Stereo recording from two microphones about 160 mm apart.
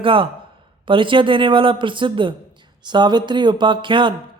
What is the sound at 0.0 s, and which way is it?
Speech, 35° right (ahead or behind).